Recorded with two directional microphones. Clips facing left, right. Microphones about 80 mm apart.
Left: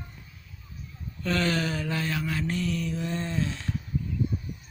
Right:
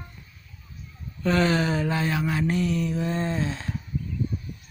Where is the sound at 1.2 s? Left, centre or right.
Right.